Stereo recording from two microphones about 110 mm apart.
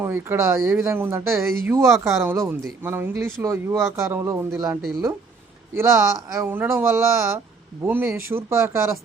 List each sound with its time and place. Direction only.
0.0 s speech: 20° right (ahead or behind)